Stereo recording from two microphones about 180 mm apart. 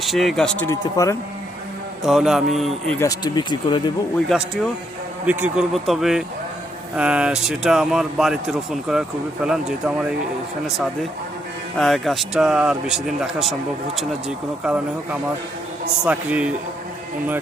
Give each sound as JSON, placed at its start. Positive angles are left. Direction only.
{"t": 0.0, "sound": "a man's voice", "side_deg": 0}
{"t": 2.0, "sound": "a man's voice", "side_deg": 0}
{"t": 3.0, "sound": "speech", "side_deg": 20}
{"t": 5.2, "sound": "a man's voice", "side_deg": -10}
{"t": 11.8, "sound": "a man's voice", "side_deg": 0}